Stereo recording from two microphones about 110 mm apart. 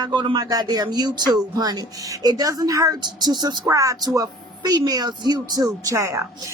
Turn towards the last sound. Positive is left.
turn(degrees=-25)  # may be behind; listen again after turning